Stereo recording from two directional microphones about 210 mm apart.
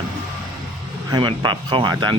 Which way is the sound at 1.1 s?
20° right (ahead or behind).